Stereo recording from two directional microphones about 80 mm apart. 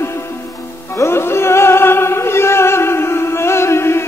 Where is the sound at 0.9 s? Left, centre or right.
Left.